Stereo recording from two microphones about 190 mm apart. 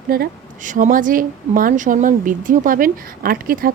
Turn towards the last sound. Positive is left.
turn(degrees=-50)  # may be behind; listen again after turning